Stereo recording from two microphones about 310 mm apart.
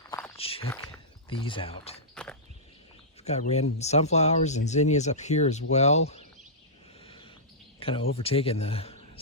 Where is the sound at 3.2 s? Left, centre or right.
Left.